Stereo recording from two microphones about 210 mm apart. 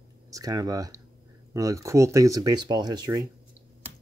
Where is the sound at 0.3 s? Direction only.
15° right (ahead or behind).